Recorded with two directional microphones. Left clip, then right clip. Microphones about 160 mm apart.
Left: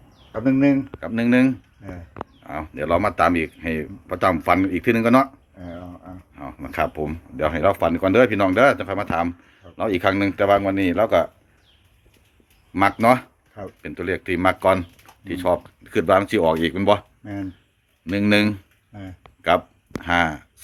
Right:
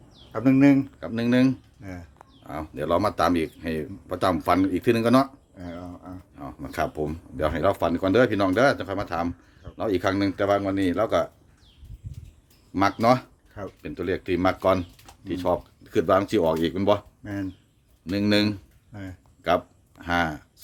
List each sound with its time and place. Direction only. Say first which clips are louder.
0.3 s speech: even; 20° right (ahead or behind)
0.9 s speech: left 4 dB; 5° right (ahead or behind)
5.5 s a sound: left 1 dB; 25° right (ahead or behind)
6.3 s speech: left 5 dB; centre (ahead or behind)
12.7 s speech: left 4 dB; 10° right (ahead or behind)
18.1 s speech: left 4 dB; 5° right (ahead or behind)